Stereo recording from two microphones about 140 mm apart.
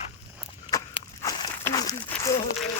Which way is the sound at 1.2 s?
25° left (ahead or behind).